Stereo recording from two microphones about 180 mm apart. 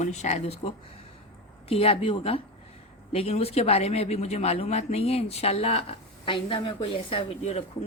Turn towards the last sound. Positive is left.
turn(degrees=35)  # may be behind; listen again after turning